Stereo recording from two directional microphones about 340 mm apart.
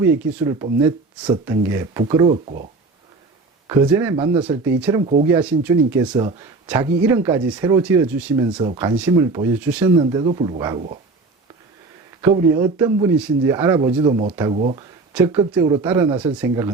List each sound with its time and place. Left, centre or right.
0.0 s speech: centre
3.7 s speech: centre
12.7 s speech: centre
15.1 s speech: centre